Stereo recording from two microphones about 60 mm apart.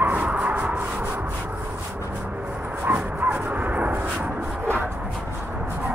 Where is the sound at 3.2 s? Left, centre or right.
Right.